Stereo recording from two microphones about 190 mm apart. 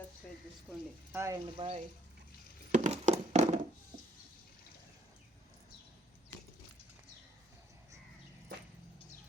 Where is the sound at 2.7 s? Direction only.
40° right (ahead or behind).